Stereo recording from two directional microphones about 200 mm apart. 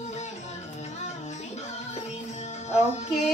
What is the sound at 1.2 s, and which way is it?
Music, 35° left (ahead or behind).